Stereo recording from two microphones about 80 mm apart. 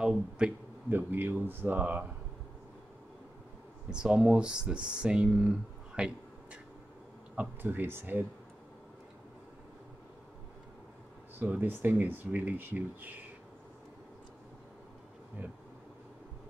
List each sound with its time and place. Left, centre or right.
0.0 s speech: centre
0.8 s speech: right
3.9 s speech: centre
7.6 s speech: right
11.3 s speech: right